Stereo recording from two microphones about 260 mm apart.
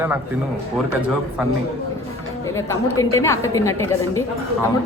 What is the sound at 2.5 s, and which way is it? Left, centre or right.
A woman's voice, centre.